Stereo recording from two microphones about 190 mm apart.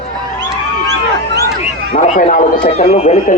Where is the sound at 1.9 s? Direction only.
40° left (ahead or behind).